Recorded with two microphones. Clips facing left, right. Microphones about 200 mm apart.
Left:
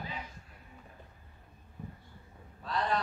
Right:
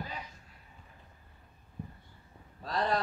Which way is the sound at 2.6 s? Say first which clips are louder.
Right 1 dB; 35° right (ahead or behind).